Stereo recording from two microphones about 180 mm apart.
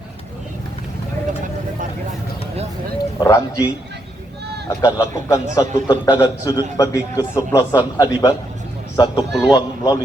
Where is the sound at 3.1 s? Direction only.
20° left (ahead or behind).